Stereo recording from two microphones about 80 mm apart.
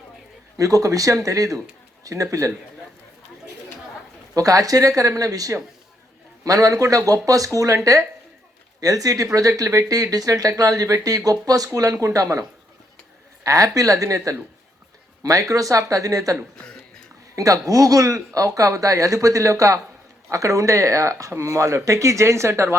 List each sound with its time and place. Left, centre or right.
0.5 s speech: right
4.4 s speech: right
8.8 s speech: right